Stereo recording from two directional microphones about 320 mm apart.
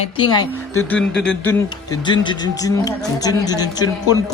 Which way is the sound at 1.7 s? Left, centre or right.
Centre.